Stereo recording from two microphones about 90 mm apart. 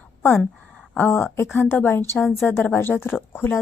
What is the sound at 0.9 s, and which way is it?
Speech, 20° left (ahead or behind).